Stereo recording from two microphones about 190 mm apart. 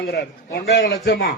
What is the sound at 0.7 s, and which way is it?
Speech, 70° left (ahead or behind).